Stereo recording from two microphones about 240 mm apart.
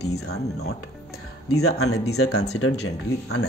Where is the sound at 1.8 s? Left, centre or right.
Left.